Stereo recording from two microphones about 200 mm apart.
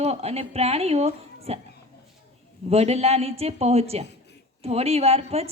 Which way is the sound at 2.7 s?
30° right (ahead or behind).